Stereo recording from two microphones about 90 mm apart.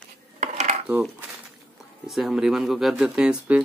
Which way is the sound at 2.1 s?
Centre (ahead or behind).